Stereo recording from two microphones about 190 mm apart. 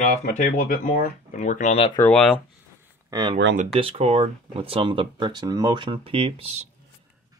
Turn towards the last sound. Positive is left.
turn(degrees=-30)  # may be behind; listen again after turning